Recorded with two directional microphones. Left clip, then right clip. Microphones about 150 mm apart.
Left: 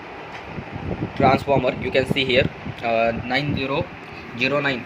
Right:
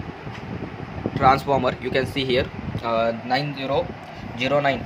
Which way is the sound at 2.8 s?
30° right (ahead or behind).